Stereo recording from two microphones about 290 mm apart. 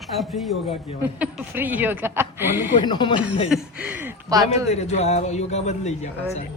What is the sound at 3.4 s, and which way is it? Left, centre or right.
Speech, centre.